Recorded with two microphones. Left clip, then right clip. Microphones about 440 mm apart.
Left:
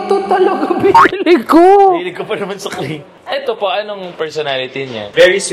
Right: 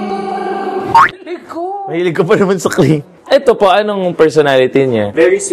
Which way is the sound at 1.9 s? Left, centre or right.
Right.